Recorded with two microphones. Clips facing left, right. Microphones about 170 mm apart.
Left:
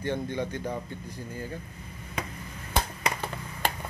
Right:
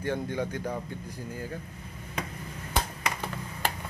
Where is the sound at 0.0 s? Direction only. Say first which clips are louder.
Even; 10° right (ahead or behind).